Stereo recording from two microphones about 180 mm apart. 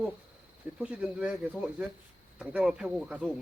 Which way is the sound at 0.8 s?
5° right (ahead or behind).